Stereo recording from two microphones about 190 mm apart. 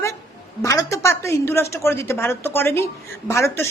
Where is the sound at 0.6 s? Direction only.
15° left (ahead or behind).